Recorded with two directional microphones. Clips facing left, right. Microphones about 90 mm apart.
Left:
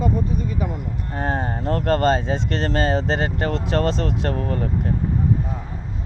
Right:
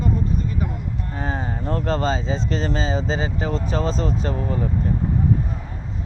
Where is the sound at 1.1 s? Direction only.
55° left (ahead or behind).